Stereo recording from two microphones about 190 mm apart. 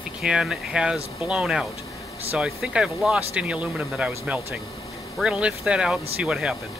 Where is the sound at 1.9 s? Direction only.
15° left (ahead or behind).